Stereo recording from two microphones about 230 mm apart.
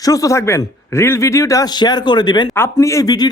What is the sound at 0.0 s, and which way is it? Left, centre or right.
A man's voice, centre.